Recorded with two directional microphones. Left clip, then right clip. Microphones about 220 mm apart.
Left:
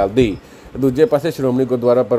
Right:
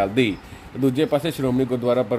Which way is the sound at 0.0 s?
20° left (ahead or behind).